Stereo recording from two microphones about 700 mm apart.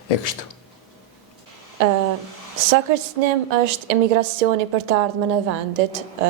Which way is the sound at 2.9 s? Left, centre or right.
Right.